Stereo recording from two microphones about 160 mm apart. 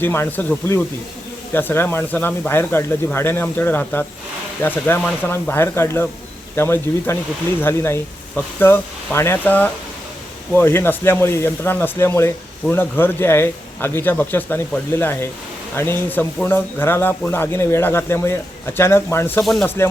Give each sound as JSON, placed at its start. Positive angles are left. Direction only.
{"t": 0.0, "sound": "speech", "side_deg": 15}